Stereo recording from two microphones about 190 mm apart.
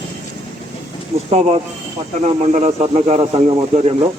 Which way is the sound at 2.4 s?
35° right (ahead or behind).